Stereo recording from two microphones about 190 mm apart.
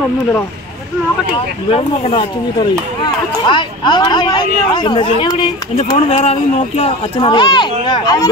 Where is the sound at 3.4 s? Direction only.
25° left (ahead or behind).